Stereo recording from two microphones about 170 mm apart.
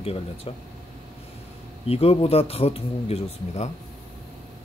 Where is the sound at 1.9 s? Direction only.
35° left (ahead or behind).